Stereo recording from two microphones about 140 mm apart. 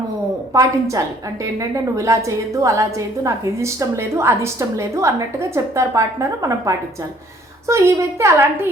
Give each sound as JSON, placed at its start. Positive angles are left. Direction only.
{"t": 0.5, "sound": "a woman's voice", "side_deg": -25}